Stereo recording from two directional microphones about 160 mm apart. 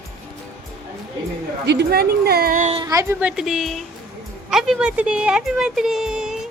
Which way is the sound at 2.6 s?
40° right (ahead or behind).